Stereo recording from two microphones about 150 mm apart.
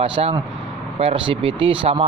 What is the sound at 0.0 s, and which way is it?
Speech, 35° right (ahead or behind).